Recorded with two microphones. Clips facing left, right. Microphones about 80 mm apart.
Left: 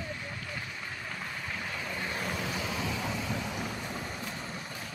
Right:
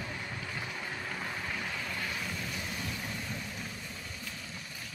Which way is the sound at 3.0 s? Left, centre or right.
Left.